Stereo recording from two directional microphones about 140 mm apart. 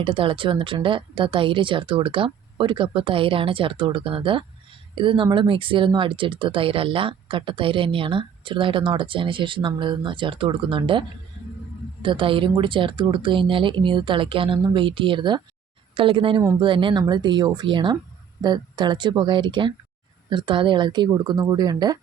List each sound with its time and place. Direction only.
0.0 s speech: 40° right (ahead or behind)
12.0 s speech: 40° right (ahead or behind)